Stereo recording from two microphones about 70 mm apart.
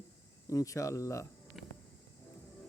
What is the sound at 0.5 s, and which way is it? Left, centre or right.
Mantra, left.